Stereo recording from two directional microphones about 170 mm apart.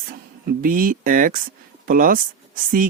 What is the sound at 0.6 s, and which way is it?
Speech, 55° right (ahead or behind).